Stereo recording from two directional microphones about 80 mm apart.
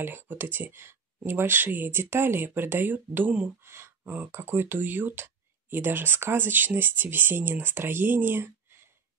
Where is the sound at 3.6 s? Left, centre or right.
Right.